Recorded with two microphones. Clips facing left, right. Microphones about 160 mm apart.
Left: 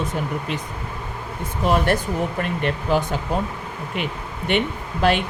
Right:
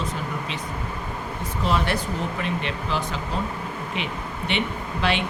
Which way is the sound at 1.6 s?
50° left (ahead or behind).